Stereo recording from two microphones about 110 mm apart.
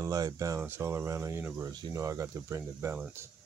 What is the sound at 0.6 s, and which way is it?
Speech, 20° right (ahead or behind).